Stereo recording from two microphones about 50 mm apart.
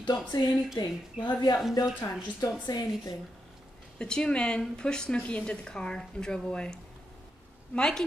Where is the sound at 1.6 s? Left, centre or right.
Centre.